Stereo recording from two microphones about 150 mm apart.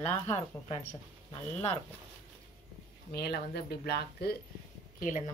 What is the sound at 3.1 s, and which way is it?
Speech, 90° left.